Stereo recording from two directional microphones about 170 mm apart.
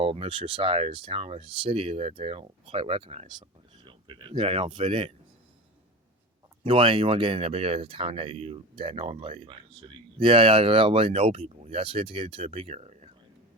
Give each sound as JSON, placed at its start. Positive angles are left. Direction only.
{"t": 0.0, "sound": "speech", "side_deg": -30}
{"t": 6.7, "sound": "speech", "side_deg": -30}